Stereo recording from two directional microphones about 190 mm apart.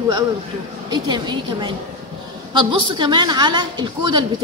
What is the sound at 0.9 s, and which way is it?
A woman's voice, 25° right (ahead or behind).